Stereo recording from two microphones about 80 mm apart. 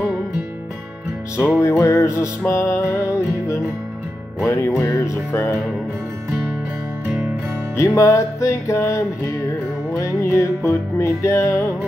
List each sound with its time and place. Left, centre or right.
1.6 s music: left
4.5 s music: left
7.7 s music: left